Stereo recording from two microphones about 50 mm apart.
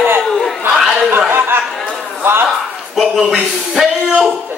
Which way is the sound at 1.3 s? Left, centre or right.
Right.